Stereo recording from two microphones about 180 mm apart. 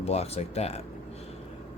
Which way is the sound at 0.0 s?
35° left (ahead or behind).